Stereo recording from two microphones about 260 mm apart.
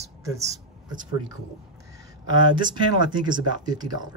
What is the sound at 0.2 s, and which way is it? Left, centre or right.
Speech, centre.